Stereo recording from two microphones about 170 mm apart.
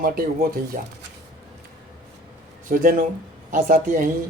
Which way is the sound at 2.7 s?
55° right (ahead or behind).